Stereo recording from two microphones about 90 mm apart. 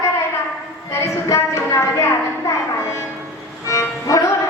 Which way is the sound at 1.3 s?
35° left (ahead or behind).